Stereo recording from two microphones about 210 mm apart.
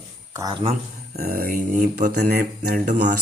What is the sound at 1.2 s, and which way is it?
Speech, 45° right (ahead or behind).